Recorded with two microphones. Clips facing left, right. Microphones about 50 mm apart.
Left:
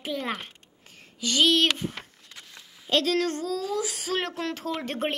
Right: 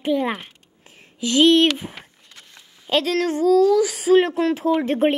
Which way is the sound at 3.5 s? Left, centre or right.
Centre.